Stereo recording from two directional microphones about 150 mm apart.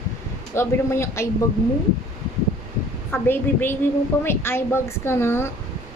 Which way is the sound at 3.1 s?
15° left (ahead or behind).